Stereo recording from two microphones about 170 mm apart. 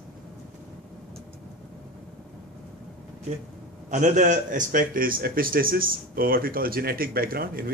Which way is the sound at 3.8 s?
45° right (ahead or behind).